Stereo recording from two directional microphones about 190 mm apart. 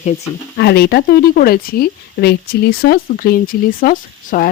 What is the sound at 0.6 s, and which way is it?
A woman's voice, 60° left (ahead or behind).